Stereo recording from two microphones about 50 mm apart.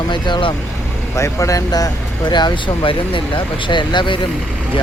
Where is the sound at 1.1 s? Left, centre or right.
Left.